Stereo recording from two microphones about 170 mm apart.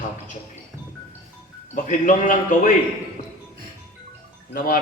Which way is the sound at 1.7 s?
50° left (ahead or behind).